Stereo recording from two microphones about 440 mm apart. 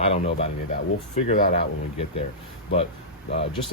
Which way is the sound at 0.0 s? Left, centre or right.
Centre.